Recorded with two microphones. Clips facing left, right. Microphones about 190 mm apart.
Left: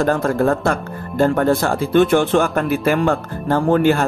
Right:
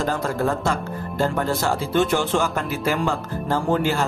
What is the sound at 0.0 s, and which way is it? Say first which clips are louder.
Speech: left 6 dB; 55° left (ahead or behind).